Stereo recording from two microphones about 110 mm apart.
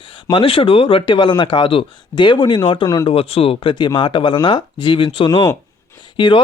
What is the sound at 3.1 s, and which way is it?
Speech, 60° left (ahead or behind).